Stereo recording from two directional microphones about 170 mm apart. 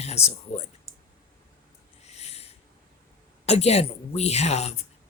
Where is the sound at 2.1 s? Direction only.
40° left (ahead or behind).